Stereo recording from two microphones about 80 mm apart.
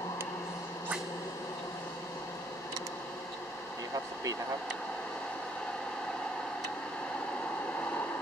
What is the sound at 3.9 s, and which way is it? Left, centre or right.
Air conditioning, right.